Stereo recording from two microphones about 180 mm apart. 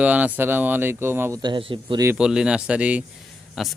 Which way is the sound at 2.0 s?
5° right (ahead or behind).